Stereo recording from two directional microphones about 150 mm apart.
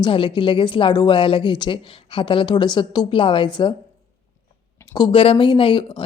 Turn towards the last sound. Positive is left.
turn(degrees=35)  # may be behind; listen again after turning